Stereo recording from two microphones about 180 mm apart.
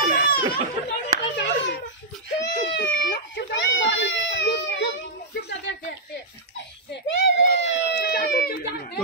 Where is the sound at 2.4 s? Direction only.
80° left.